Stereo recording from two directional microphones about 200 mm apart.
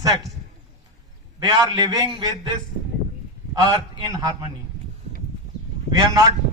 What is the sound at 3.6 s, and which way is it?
Speech, 20° right (ahead or behind).